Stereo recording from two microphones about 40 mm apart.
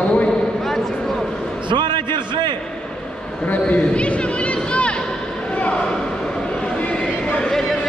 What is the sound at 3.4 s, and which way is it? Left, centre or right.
Speech, left.